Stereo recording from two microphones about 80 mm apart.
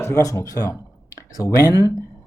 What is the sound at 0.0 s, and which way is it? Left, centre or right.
Speech, left.